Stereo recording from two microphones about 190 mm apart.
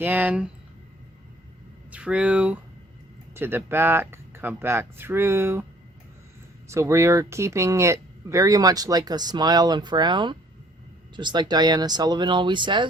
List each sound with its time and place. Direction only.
0.0 s speech: 10° right (ahead or behind)
1.9 s speech: 5° right (ahead or behind)
6.7 s speech: 15° right (ahead or behind)